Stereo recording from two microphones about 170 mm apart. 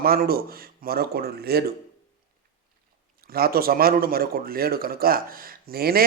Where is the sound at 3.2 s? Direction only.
60° right (ahead or behind).